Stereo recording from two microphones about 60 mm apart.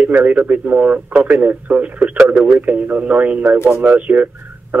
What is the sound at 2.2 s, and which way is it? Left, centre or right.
Speech, right.